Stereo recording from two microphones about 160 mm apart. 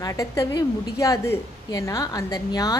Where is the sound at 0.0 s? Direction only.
20° left (ahead or behind).